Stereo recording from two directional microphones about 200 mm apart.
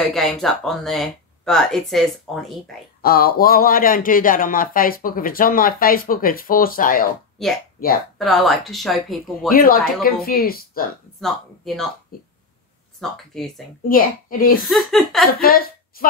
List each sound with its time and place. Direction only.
0.0 s speech: centre (ahead or behind)
3.0 s speech: 50° left (ahead or behind)
8.2 s speech: centre (ahead or behind)
9.5 s speech: 45° left (ahead or behind)
11.1 s speech: centre (ahead or behind)
12.1 s speech: 45° left (ahead or behind)
13.0 s speech: centre (ahead or behind)
13.8 s speech: 45° left (ahead or behind)
14.6 s speech: centre (ahead or behind)
15.4 s a woman's voice: 45° left (ahead or behind)